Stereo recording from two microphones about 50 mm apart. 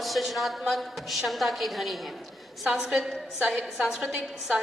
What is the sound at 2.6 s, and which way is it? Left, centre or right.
A woman's voice, centre.